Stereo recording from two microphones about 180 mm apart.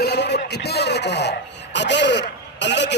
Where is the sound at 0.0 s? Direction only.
65° left (ahead or behind).